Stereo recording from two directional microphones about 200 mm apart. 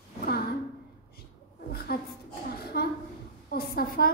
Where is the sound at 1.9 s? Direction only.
50° left (ahead or behind).